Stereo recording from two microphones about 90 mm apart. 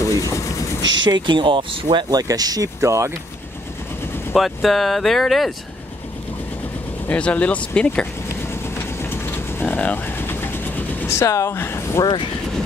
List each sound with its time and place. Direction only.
0.0 s vehicle: 35° left (ahead or behind)
1.0 s speech: 55° right (ahead or behind); by 3.1 s 35° right (ahead or behind)
4.3 s speech: centre (ahead or behind)
7.1 s speech: 15° left (ahead or behind)
9.1 s train: 25° left (ahead or behind)
11.1 s speech: 35° left (ahead or behind)